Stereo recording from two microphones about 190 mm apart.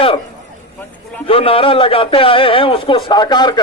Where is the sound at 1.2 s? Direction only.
30° left (ahead or behind).